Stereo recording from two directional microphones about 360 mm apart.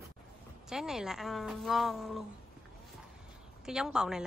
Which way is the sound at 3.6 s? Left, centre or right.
Centre.